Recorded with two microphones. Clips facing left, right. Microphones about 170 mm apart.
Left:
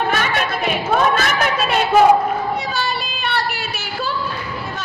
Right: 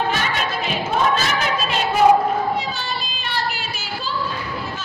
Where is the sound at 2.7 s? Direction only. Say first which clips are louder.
Left 5 dB; 65° left (ahead or behind).